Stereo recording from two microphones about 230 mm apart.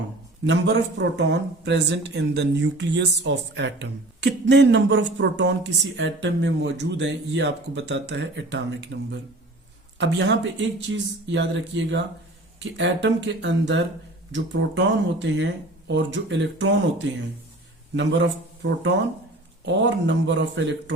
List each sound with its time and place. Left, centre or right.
0.4 s speech: right
10.0 s speech: right